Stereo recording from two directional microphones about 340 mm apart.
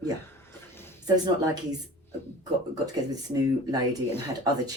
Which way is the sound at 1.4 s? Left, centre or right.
Centre.